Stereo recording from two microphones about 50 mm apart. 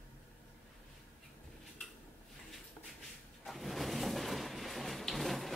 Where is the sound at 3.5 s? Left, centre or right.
Centre.